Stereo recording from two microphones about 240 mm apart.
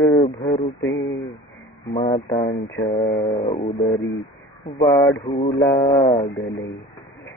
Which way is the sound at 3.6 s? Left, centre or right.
Centre.